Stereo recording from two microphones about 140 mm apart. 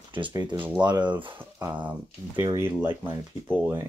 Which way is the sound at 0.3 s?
30° right (ahead or behind).